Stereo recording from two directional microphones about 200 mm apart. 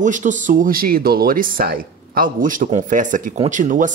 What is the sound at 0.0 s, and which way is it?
Speech, 40° right (ahead or behind).